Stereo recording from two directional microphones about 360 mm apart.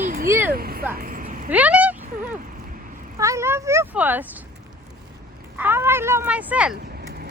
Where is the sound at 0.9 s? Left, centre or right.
Right.